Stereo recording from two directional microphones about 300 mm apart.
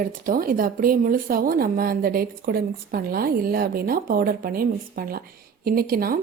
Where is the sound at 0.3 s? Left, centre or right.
Right.